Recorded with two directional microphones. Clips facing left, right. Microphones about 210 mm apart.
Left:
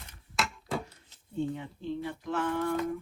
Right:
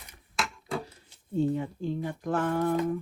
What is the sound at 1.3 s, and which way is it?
Speech, 40° right (ahead or behind).